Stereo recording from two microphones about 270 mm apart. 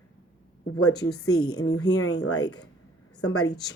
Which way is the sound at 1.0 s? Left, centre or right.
Left.